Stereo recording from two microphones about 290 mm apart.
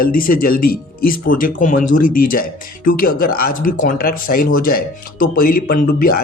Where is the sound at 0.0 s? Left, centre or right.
Left.